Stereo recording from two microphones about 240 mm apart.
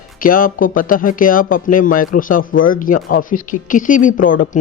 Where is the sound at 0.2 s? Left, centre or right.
Left.